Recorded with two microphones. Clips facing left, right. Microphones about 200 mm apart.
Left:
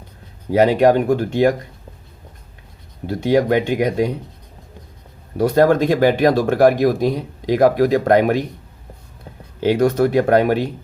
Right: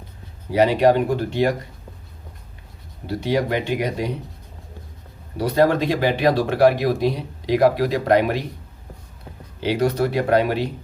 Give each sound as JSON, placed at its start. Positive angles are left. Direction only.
{"t": 0.5, "sound": "speech", "side_deg": 50}
{"t": 3.1, "sound": "speech", "side_deg": 50}
{"t": 5.4, "sound": "speech", "side_deg": 50}
{"t": 9.6, "sound": "speech", "side_deg": 50}